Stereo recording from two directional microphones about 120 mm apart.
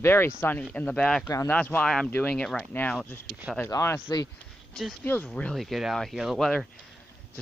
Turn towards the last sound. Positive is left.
turn(degrees=5)  # may be behind; listen again after turning